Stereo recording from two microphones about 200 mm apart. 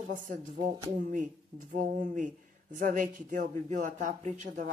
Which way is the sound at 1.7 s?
40° right (ahead or behind).